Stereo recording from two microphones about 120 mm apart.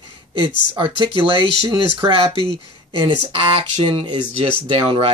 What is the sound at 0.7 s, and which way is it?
Speech, 45° right (ahead or behind).